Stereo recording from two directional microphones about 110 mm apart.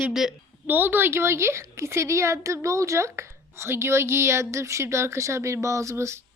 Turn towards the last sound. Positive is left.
turn(degrees=-25)  # may be behind; listen again after turning